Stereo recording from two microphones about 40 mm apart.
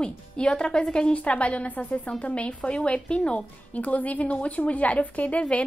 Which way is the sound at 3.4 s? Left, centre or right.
Left.